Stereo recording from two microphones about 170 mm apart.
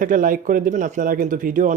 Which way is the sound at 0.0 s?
50° right (ahead or behind).